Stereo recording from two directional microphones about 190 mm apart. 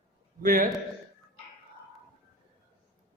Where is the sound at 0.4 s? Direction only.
50° right (ahead or behind).